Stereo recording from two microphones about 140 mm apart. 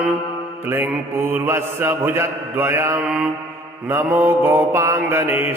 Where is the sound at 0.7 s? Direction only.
15° right (ahead or behind).